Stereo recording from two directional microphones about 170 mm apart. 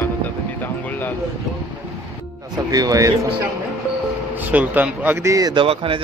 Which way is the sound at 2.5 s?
20° right (ahead or behind).